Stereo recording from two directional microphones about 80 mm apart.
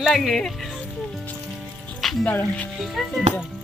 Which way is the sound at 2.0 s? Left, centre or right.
Centre.